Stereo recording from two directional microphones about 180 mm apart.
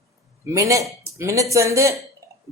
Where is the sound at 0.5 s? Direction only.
15° right (ahead or behind).